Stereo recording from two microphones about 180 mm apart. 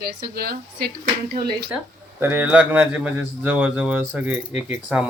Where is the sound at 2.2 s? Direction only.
10° right (ahead or behind).